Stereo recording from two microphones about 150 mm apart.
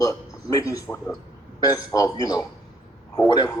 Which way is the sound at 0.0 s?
20° left (ahead or behind).